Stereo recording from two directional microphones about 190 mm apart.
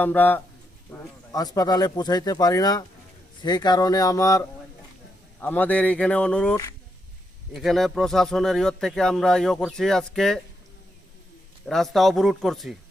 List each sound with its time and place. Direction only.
0.0 s speech: 10° left (ahead or behind)
11.6 s speech: centre (ahead or behind)